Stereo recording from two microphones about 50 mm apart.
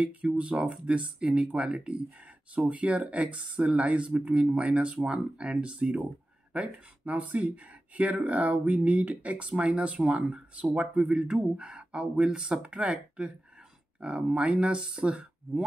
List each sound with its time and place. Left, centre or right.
0.0 s speech: right